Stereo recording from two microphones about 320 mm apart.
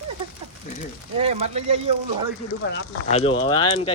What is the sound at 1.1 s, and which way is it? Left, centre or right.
Speech, centre.